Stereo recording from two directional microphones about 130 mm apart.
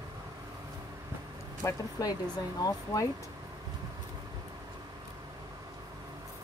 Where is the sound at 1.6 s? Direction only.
30° left (ahead or behind).